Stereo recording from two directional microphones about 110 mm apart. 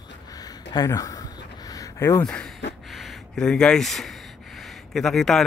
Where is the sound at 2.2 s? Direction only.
5° left (ahead or behind).